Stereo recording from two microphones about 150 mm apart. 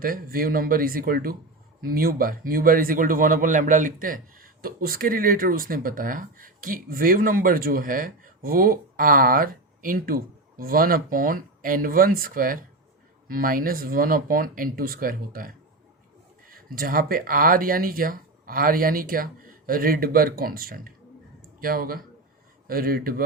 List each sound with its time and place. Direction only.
0.0 s speech: 70° right (ahead or behind)